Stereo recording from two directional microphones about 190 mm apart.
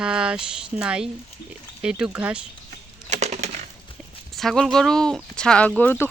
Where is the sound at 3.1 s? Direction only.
35° right (ahead or behind).